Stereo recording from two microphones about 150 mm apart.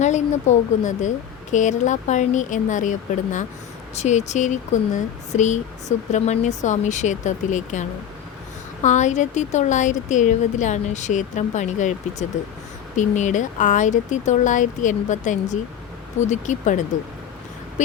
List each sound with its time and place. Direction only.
0.0 s speech: 50° left (ahead or behind)
3.9 s speech: 50° left (ahead or behind)
13.0 s speech: 55° left (ahead or behind)
17.8 s vehicle: 55° left (ahead or behind)